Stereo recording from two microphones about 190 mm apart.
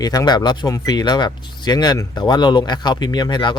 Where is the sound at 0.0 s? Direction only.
20° left (ahead or behind).